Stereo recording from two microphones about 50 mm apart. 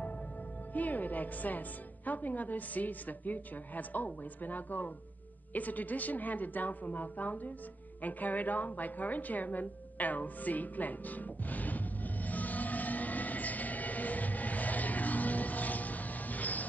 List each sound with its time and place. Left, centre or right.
0.7 s a woman's voice: left
8.0 s music: left